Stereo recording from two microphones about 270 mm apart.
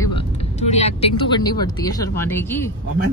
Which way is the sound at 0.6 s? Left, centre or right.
Left.